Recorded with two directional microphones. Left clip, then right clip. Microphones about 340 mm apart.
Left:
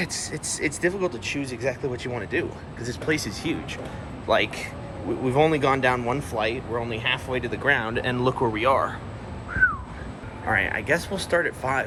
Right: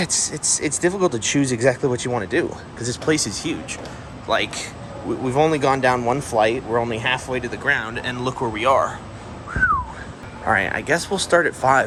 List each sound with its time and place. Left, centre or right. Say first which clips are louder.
0.0 s speech: right 7 dB; centre
10.4 s speech: right 4 dB; centre